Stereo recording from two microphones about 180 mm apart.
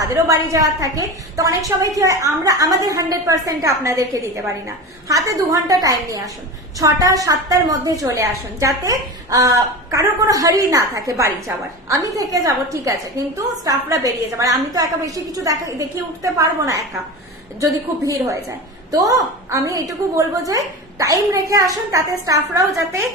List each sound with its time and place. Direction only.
0.0 s a woman's voice: 15° right (ahead or behind)